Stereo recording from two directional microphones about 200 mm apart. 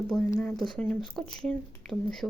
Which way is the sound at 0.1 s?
5° left (ahead or behind).